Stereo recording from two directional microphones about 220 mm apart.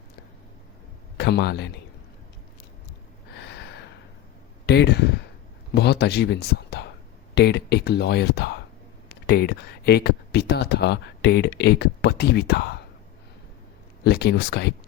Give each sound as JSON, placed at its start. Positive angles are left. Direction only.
{"t": 1.1, "sound": "a man's voice", "side_deg": 50}
{"t": 3.3, "sound": "gasp", "side_deg": 50}
{"t": 4.6, "sound": "speech", "side_deg": 50}
{"t": 14.0, "sound": "speech", "side_deg": 50}